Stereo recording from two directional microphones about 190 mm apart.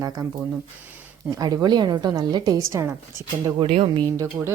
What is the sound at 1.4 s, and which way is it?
Speech, 20° right (ahead or behind).